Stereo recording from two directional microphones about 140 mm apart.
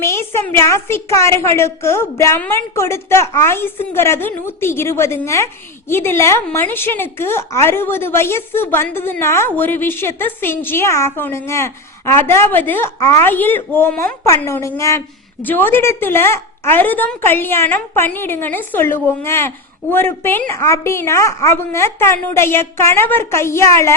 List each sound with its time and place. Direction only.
0.0 s a woman's voice: 20° left (ahead or behind)